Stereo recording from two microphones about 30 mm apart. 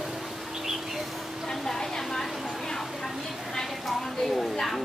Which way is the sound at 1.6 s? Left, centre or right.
Centre.